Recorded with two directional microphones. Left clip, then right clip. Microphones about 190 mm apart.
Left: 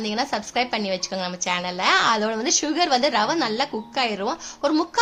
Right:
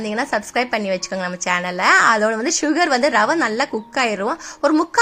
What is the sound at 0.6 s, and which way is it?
A woman's voice, 20° right (ahead or behind).